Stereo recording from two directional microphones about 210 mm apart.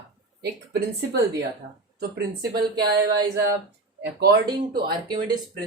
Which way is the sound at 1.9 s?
50° right (ahead or behind).